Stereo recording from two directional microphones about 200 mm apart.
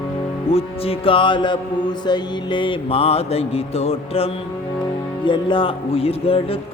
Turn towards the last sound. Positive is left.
turn(degrees=30)  # may be behind; listen again after turning